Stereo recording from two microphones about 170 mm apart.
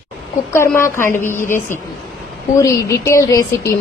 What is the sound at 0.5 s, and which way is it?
A woman's voice, 15° left (ahead or behind).